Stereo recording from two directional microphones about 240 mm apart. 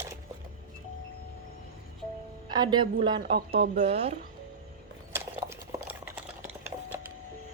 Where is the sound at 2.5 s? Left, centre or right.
Centre.